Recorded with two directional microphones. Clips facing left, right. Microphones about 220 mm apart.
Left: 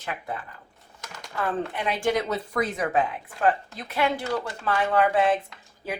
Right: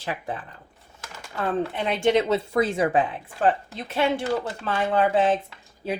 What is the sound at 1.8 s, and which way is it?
Speech, 25° right (ahead or behind).